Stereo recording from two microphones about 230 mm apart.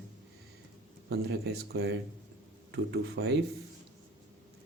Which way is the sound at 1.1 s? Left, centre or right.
Right.